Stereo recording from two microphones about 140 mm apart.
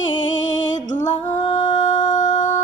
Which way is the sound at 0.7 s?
60° left (ahead or behind).